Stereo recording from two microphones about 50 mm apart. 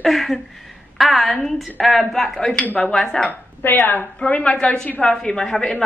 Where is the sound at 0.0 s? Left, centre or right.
Centre.